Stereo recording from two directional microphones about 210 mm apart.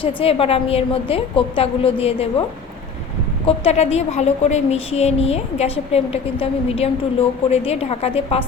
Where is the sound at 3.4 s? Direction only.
30° left (ahead or behind).